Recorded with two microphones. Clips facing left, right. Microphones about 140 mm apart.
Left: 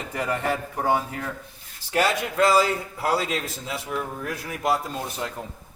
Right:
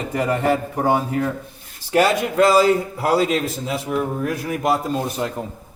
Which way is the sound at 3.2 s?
60° right (ahead or behind).